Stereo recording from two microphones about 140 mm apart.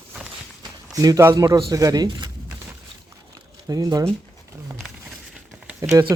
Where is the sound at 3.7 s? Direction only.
25° right (ahead or behind).